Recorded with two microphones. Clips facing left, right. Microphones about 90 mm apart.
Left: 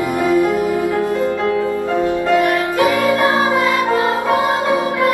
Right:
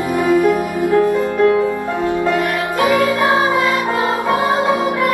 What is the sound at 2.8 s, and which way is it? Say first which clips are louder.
Music: right 1 dB; 20° right (ahead or behind).